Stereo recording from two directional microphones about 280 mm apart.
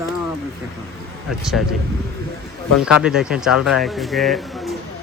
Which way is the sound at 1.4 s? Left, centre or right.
Centre.